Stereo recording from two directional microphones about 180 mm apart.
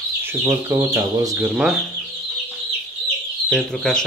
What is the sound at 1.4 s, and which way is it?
Speech, centre (ahead or behind).